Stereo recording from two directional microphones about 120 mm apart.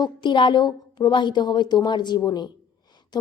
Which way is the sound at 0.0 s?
40° left (ahead or behind).